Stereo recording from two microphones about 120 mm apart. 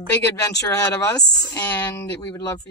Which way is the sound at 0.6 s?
30° left (ahead or behind).